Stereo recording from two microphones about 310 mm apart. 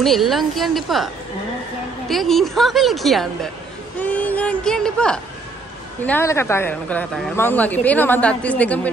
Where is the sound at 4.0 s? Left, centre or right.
Centre.